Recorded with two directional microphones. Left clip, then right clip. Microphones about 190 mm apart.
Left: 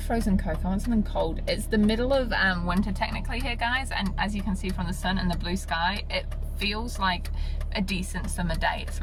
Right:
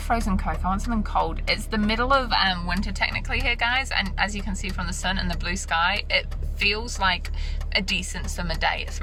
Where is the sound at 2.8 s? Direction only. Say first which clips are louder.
Right 4 dB; 15° left (ahead or behind).